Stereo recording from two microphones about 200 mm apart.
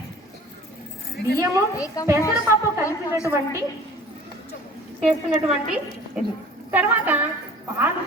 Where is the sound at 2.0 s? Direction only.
20° left (ahead or behind).